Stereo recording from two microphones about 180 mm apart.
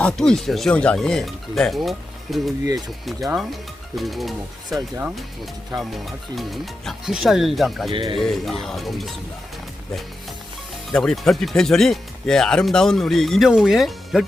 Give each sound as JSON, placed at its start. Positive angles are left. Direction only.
{"t": 0.0, "sound": "speech", "side_deg": 5}
{"t": 2.6, "sound": "speech", "side_deg": -20}
{"t": 3.9, "sound": "speech", "side_deg": 0}
{"t": 7.9, "sound": "speech", "side_deg": -30}
{"t": 8.2, "sound": "speech", "side_deg": 0}
{"t": 10.9, "sound": "speech", "side_deg": 0}